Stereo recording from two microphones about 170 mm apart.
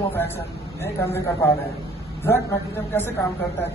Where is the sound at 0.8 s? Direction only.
15° left (ahead or behind).